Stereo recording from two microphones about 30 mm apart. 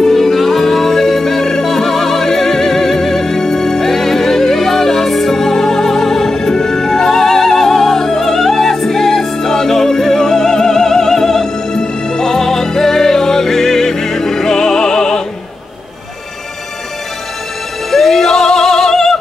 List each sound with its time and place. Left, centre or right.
0.0 s music: centre
17.9 s music: centre